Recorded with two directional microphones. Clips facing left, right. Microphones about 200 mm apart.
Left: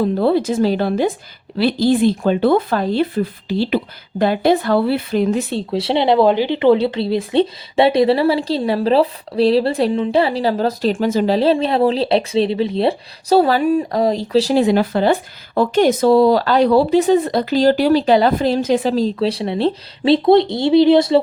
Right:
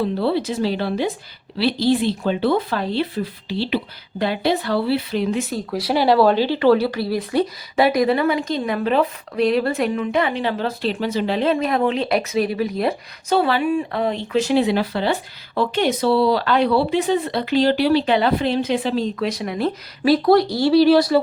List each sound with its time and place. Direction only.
0.0 s speech: 45° left (ahead or behind); by 21.2 s 20° left (ahead or behind)